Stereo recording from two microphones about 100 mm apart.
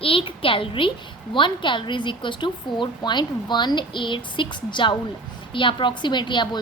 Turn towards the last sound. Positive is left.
turn(degrees=50)  # may be behind; listen again after turning